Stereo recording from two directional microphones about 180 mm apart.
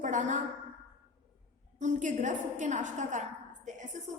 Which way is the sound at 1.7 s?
40° right (ahead or behind).